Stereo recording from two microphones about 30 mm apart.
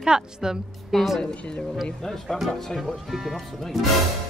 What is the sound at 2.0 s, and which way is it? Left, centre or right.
Speech, centre.